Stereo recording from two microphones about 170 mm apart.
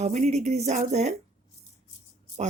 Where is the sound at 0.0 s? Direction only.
40° right (ahead or behind).